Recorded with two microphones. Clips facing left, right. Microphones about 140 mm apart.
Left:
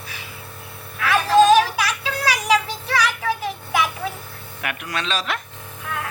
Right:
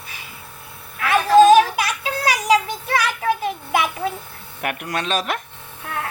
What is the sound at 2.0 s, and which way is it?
Child singing, 45° right (ahead or behind).